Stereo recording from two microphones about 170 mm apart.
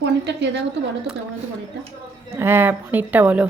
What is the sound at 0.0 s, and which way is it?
Speech, 90° right.